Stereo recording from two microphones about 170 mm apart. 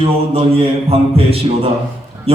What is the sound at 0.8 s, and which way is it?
Speech, 35° right (ahead or behind).